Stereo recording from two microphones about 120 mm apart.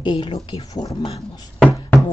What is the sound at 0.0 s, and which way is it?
Speech, 40° left (ahead or behind).